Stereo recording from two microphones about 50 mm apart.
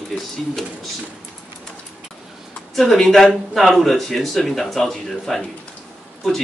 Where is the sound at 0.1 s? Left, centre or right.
Centre.